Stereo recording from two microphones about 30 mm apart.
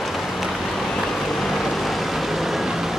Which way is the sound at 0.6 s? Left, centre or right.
Centre.